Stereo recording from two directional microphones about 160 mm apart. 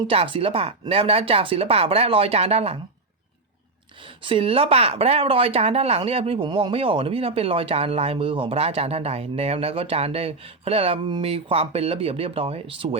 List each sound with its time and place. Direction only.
0.1 s speech: 35° right (ahead or behind)
4.2 s speech: 35° right (ahead or behind)